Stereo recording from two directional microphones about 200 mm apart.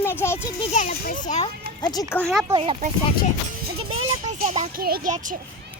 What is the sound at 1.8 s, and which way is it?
Speech, 20° left (ahead or behind).